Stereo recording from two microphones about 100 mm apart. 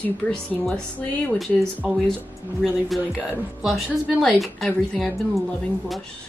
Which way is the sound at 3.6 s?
Centre (ahead or behind).